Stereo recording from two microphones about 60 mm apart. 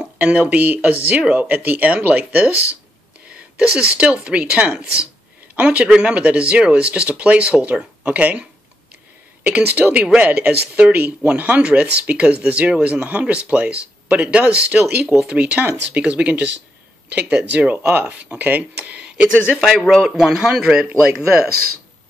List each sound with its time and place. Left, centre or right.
0.2 s speech: right
5.9 s speech: centre